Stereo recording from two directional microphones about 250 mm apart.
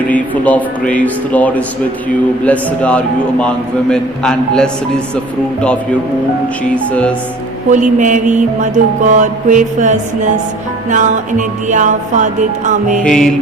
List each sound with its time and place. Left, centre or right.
0.1 s a man's voice: centre
6.7 s a man's voice: centre
7.7 s music: right
13.0 s a man's voice: centre